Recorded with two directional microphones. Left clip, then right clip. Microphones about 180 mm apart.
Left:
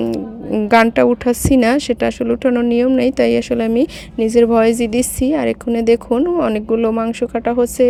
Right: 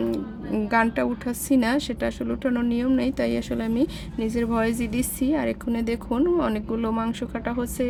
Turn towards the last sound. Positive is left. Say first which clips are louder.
# left 13 dB
turn(degrees=35)  # may be behind; listen again after turning